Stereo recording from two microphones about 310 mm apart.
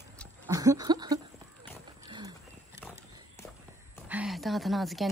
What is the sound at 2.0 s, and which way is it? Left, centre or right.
Wild animals, centre.